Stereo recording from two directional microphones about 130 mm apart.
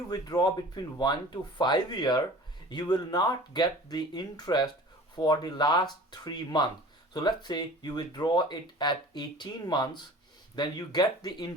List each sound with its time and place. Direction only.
0.1 s speech: 30° left (ahead or behind)